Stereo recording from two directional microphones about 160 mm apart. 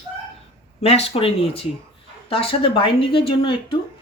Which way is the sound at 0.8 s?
40° left (ahead or behind).